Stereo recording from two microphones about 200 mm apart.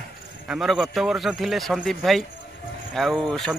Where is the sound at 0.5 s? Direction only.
Centre (ahead or behind).